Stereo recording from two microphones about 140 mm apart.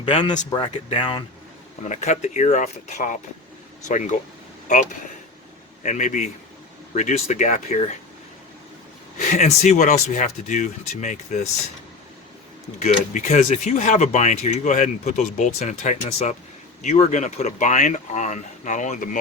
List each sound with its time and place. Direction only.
0.1 s speech: 35° left (ahead or behind)
1.8 s speech: 55° left (ahead or behind)
9.3 s speech: 55° left (ahead or behind)
12.8 s speech: 60° left (ahead or behind)